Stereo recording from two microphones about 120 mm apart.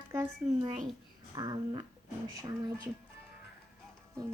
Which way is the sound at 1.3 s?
35° right (ahead or behind).